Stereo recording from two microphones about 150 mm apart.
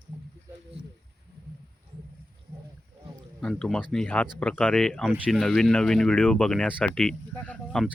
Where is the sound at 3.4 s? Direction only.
5° left (ahead or behind).